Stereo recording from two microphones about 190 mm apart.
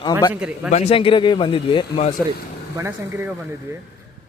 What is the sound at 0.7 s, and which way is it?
A man's voice, 30° left (ahead or behind).